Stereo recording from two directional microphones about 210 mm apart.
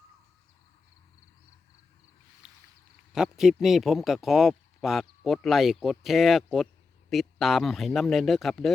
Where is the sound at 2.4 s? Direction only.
5° right (ahead or behind).